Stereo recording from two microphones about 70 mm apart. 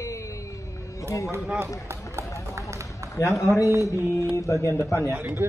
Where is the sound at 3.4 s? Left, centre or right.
Left.